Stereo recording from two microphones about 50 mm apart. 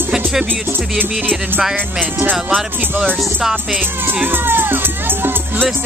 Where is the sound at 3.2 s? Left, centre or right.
Centre.